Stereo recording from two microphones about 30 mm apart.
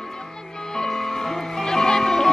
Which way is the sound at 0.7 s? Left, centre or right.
Left.